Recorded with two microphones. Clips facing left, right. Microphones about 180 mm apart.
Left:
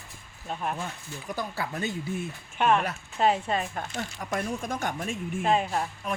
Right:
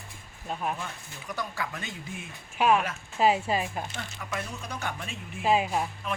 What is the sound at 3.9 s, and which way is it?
Speech, 45° left (ahead or behind).